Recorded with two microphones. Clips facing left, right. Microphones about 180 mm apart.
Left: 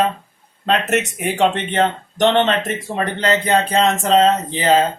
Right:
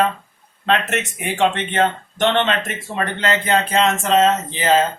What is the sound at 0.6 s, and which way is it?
Speech, 40° left (ahead or behind).